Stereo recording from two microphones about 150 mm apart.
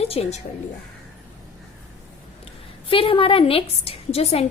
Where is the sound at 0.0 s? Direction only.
40° left (ahead or behind).